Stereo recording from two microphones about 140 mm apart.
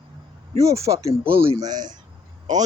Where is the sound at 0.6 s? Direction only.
20° right (ahead or behind).